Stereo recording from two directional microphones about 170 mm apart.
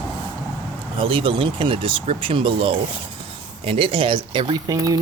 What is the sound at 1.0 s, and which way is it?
Speech, 30° right (ahead or behind).